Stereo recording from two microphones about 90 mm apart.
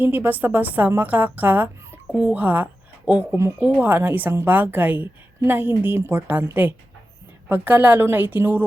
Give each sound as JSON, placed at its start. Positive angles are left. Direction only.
{"t": 0.0, "sound": "a woman's voice", "side_deg": -20}
{"t": 3.8, "sound": "a woman's voice", "side_deg": -20}